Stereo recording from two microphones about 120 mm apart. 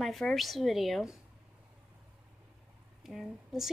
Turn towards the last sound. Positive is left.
turn(degrees=0)  # may be behind; listen again after turning